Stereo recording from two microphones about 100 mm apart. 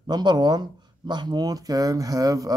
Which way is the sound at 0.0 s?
45° right (ahead or behind).